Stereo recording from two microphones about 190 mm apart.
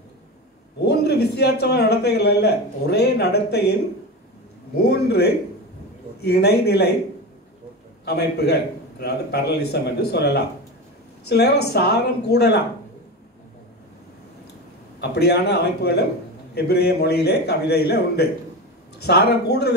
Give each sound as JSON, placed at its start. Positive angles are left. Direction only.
{"t": 0.7, "sound": "a man's voice", "side_deg": 60}
{"t": 4.8, "sound": "a man's voice", "side_deg": 60}
{"t": 8.0, "sound": "a man's voice", "side_deg": 60}
{"t": 15.0, "sound": "a man's voice", "side_deg": 60}